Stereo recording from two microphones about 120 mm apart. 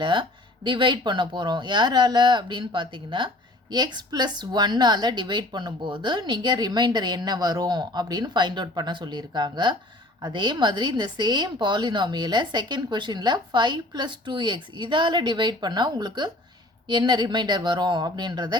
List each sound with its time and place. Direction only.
0.0 s a woman's voice: 40° right (ahead or behind)